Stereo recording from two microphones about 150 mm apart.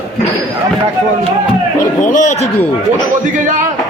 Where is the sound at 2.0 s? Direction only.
55° left (ahead or behind).